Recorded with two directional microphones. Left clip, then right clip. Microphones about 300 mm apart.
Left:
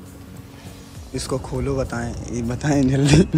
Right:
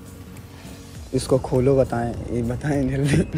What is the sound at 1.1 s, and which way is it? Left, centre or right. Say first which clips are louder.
Speech: right 6 dB; centre.